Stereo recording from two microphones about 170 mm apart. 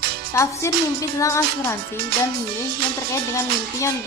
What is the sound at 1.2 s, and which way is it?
Speech, 15° left (ahead or behind).